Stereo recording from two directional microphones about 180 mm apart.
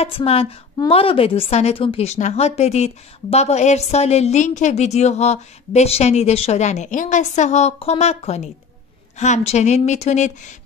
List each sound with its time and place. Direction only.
0.0 s speech: 35° left (ahead or behind)